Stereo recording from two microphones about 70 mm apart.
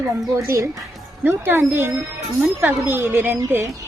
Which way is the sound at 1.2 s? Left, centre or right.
Right.